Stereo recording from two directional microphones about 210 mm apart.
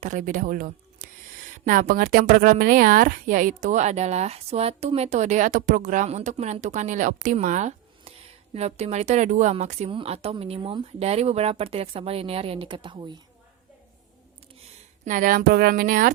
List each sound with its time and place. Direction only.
0.0 s a woman's voice: 35° right (ahead or behind)
15.0 s a woman's voice: 40° right (ahead or behind)